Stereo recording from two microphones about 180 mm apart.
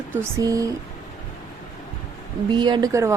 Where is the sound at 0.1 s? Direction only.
15° right (ahead or behind).